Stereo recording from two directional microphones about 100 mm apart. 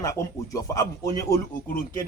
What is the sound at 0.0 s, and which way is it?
Speech, 35° left (ahead or behind).